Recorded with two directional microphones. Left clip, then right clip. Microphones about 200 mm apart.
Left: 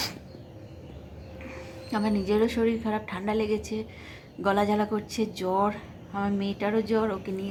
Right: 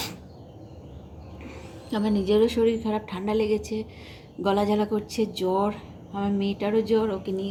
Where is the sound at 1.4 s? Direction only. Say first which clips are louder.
Even; centre (ahead or behind).